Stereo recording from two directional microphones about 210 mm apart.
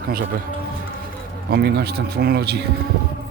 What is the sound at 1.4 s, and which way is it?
Speech, 50° right (ahead or behind).